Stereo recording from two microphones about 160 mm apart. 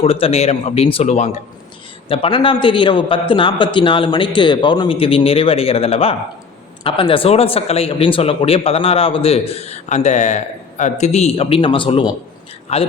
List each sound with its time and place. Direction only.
0.0 s a man's voice: 40° left (ahead or behind)